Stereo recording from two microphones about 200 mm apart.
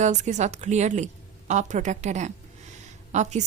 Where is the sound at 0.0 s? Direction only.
35° right (ahead or behind).